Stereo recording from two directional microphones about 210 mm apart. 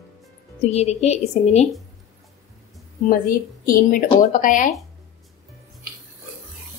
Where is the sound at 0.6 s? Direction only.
30° left (ahead or behind).